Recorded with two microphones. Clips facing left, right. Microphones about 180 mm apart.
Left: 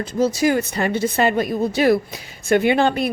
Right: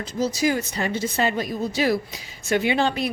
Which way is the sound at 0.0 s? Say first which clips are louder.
Left 5 dB; 55° left (ahead or behind).